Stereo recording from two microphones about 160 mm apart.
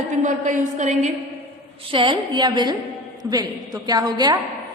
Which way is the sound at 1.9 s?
30° right (ahead or behind).